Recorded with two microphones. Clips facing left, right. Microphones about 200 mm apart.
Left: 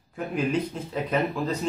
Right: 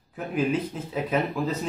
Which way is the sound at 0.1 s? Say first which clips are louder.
Right 1 dB; 5° right (ahead or behind).